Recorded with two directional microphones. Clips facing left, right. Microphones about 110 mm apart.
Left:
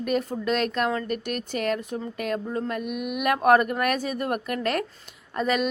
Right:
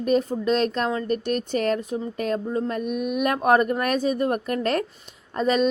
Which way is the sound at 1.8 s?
20° right (ahead or behind).